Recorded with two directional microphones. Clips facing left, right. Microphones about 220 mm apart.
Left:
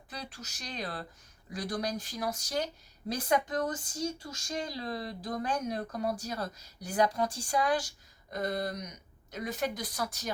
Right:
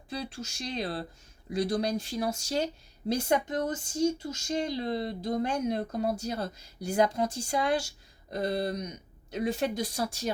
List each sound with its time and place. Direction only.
0.1 s speech: 25° right (ahead or behind)